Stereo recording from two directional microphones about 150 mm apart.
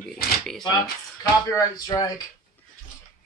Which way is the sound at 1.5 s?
25° left (ahead or behind).